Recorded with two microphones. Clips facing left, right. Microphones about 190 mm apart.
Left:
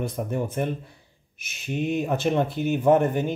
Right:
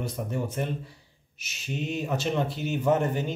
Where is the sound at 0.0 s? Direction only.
55° left (ahead or behind).